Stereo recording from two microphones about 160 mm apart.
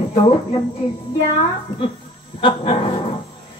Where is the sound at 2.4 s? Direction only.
35° left (ahead or behind).